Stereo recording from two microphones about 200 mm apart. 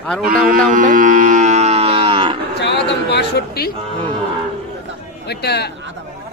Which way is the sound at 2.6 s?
60° left (ahead or behind).